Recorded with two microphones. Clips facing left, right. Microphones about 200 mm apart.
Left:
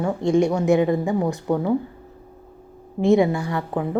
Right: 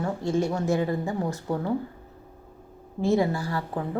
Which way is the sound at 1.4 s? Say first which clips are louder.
Left 6 dB; 55° left (ahead or behind).